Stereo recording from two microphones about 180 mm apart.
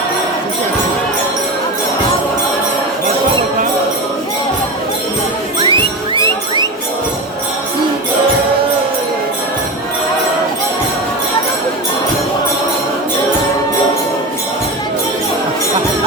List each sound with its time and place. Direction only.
5.6 s music: 25° right (ahead or behind)